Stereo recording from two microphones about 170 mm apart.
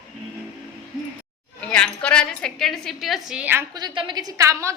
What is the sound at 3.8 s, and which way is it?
Speech, 25° right (ahead or behind).